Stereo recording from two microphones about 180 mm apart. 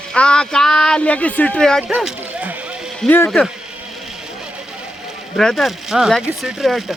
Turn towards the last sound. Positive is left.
turn(degrees=0)  # may be behind; listen again after turning